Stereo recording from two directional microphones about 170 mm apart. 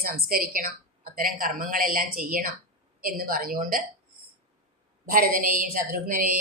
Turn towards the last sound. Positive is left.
turn(degrees=-50)  # may be behind; listen again after turning